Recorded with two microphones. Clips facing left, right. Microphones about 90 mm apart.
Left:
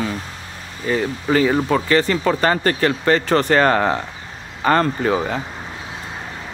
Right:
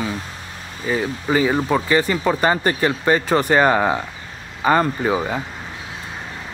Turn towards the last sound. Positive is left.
turn(degrees=-5)  # may be behind; listen again after turning